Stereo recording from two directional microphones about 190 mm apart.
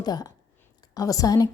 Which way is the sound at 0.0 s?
20° left (ahead or behind).